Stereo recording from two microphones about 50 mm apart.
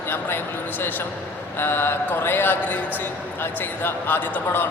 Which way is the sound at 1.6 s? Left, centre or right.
Left.